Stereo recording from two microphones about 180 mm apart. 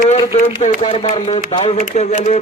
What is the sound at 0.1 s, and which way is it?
Speech, 40° left (ahead or behind).